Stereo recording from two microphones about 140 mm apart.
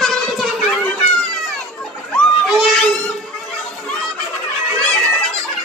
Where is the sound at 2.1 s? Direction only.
Centre (ahead or behind).